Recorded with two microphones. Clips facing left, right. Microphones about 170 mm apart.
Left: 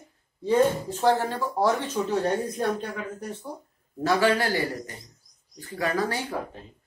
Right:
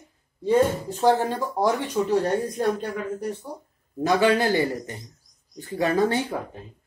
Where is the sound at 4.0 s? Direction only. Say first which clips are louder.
Right 3 dB; 20° right (ahead or behind).